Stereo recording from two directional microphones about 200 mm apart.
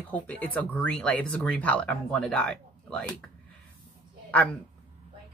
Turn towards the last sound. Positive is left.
turn(degrees=5)  # may be behind; listen again after turning